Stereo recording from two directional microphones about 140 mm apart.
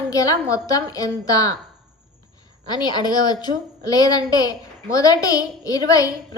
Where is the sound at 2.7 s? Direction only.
30° left (ahead or behind).